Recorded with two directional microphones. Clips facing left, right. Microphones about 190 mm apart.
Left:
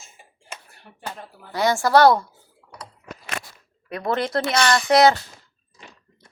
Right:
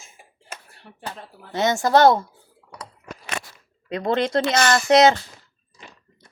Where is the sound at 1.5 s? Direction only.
20° right (ahead or behind).